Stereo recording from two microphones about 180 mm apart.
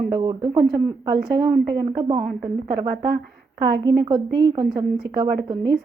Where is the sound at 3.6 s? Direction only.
25° right (ahead or behind).